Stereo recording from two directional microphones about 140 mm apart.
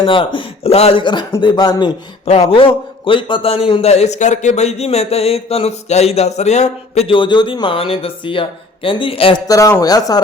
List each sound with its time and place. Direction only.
0.0 s a man's voice: 35° left (ahead or behind); by 7.1 s 50° left (ahead or behind)
7.1 s speech: 35° left (ahead or behind)
9.5 s speech: 25° left (ahead or behind)